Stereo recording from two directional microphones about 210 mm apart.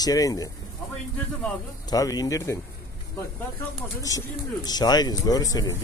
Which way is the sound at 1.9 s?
15° left (ahead or behind).